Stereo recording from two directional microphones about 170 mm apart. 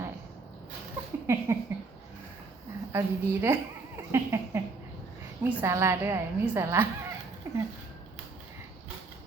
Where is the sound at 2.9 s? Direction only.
15° right (ahead or behind).